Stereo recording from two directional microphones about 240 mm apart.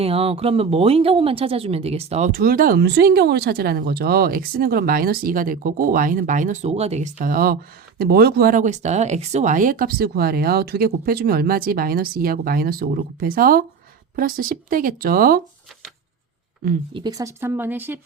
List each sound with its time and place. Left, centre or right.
0.0 s speech: right
16.9 s speech: centre